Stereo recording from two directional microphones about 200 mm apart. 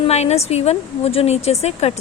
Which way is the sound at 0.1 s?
35° left (ahead or behind).